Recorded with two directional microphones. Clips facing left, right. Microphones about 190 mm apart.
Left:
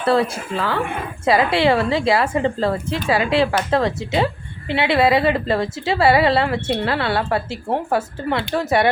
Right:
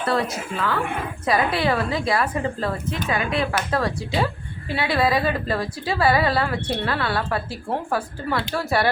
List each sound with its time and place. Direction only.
0.0 s a woman's voice: 30° left (ahead or behind)